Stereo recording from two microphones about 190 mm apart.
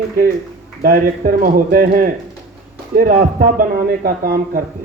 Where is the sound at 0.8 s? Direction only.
50° right (ahead or behind).